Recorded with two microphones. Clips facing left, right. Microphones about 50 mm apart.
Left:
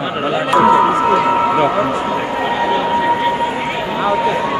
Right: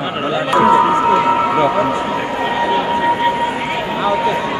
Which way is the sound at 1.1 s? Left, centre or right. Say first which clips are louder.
Even; centre.